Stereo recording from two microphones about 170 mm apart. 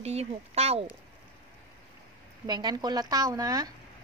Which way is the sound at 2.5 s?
25° right (ahead or behind).